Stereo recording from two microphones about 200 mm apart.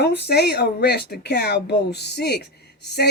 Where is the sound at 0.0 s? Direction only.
55° left (ahead or behind).